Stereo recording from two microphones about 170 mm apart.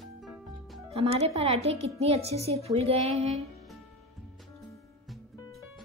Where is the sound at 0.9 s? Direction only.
35° right (ahead or behind).